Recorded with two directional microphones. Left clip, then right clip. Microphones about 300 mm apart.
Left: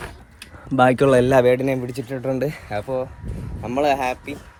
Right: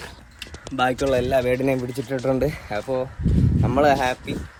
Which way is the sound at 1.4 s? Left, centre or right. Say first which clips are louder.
Left 3 dB; centre.